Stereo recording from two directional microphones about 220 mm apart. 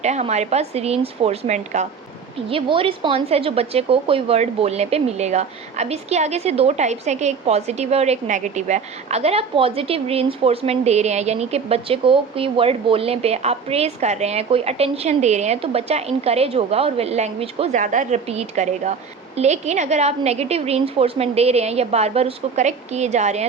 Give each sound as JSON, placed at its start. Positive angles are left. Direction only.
{"t": 0.0, "sound": "a woman's voice", "side_deg": -30}